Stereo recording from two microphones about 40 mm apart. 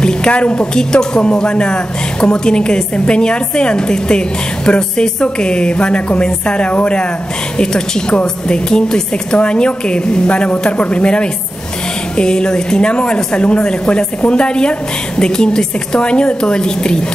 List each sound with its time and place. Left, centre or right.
0.0 s a woman's voice: left
0.7 s speech: centre